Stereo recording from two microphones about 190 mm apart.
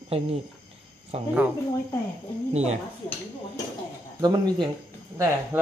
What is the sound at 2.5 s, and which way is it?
Speech, 35° right (ahead or behind).